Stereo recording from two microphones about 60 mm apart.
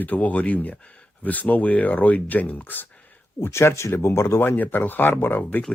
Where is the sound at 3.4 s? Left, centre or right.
Left.